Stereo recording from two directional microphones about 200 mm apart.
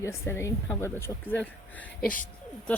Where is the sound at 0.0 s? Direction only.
15° left (ahead or behind).